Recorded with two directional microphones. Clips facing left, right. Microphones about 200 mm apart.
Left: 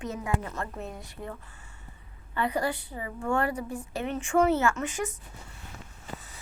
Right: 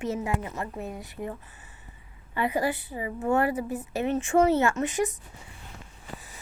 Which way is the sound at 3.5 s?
20° right (ahead or behind).